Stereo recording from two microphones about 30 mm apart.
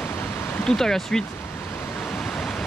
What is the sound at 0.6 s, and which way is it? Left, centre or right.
Speech, centre.